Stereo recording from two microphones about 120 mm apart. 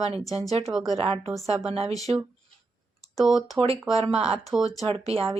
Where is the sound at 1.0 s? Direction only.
55° right (ahead or behind).